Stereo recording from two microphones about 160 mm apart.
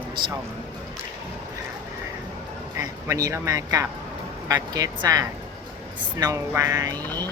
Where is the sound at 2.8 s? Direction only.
20° right (ahead or behind).